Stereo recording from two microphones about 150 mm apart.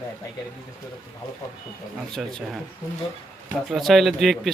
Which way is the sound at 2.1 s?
Centre (ahead or behind).